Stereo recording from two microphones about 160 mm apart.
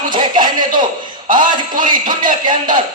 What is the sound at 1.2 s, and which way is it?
Speech, 60° right (ahead or behind).